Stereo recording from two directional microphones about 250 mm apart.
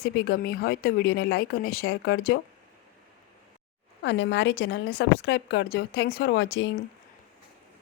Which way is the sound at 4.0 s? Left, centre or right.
Left.